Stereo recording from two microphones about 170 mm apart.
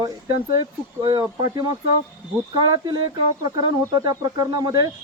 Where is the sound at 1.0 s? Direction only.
25° right (ahead or behind).